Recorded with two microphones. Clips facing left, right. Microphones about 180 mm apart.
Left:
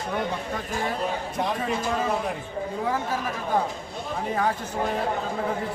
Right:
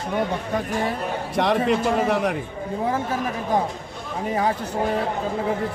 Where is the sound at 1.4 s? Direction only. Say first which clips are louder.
Right 9 dB; 75° right (ahead or behind).